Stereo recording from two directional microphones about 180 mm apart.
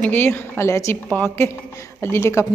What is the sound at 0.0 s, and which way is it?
A woman's voice, 10° left (ahead or behind).